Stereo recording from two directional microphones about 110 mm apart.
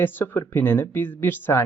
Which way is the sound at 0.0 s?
20° left (ahead or behind).